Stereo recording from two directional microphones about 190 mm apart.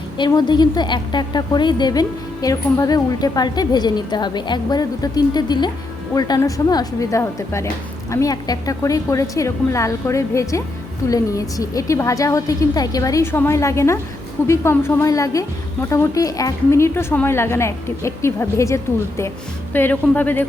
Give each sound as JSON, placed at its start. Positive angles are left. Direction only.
{"t": 0.2, "sound": "a woman's voice", "side_deg": 25}